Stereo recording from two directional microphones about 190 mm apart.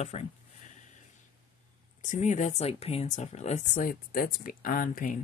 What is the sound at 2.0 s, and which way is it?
Speech, 40° left (ahead or behind).